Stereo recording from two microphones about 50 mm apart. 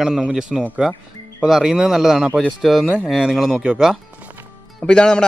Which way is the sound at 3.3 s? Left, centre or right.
Centre.